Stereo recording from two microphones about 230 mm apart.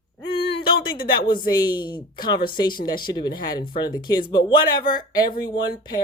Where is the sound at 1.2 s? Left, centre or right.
Centre.